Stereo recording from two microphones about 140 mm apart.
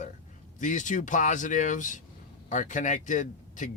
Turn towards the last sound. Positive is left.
turn(degrees=65)  # may be behind; listen again after turning